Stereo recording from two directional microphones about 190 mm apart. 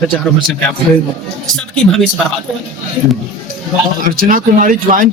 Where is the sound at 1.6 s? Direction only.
5° left (ahead or behind).